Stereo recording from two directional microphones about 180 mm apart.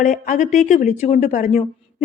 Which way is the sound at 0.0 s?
45° left (ahead or behind).